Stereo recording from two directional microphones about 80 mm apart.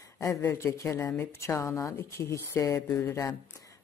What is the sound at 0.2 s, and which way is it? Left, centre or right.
Speech, left.